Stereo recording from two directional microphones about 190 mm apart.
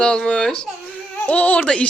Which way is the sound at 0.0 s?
5° left (ahead or behind).